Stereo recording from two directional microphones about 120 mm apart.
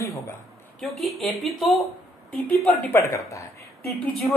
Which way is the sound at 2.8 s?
20° left (ahead or behind).